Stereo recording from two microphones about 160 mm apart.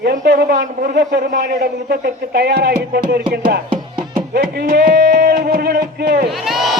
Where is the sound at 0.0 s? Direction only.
80° right.